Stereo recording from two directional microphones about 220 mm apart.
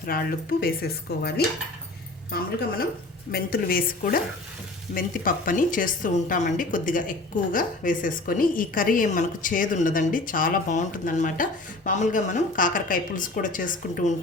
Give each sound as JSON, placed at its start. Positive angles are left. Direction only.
{"t": 0.0, "sound": "a woman's voice", "side_deg": 40}